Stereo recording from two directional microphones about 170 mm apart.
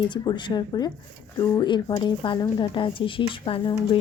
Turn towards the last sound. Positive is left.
turn(degrees=30)  # may be behind; listen again after turning